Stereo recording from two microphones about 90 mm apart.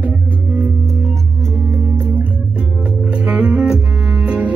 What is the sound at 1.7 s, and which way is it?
Music, 30° right (ahead or behind).